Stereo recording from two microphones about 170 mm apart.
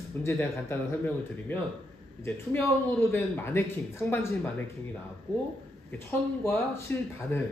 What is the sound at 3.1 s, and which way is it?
Speech, 10° left (ahead or behind).